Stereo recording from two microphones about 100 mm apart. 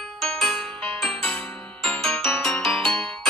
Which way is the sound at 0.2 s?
5° left (ahead or behind).